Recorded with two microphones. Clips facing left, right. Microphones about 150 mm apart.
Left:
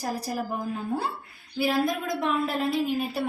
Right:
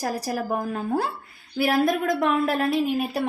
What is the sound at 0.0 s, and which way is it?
A woman's voice, 70° right (ahead or behind).